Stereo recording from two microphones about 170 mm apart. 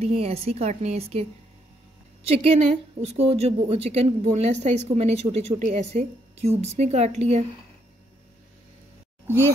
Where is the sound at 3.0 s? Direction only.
40° right (ahead or behind).